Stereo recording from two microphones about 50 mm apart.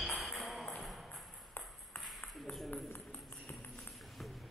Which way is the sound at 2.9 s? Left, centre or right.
Left.